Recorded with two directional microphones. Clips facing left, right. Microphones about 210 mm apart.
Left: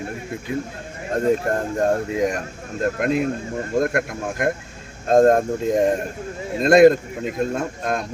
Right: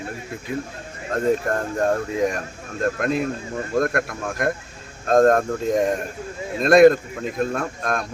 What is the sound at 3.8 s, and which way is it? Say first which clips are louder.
A man's voice: left 1 dB; 20° left (ahead or behind).